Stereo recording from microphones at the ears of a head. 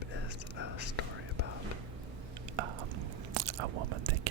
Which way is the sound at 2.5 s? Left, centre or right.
Right.